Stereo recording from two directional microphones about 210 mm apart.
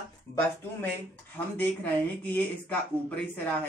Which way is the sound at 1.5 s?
10° left (ahead or behind).